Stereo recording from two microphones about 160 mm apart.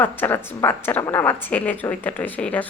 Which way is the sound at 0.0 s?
10° left (ahead or behind).